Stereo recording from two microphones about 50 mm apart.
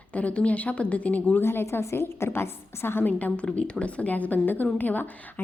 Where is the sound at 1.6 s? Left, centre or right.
Left.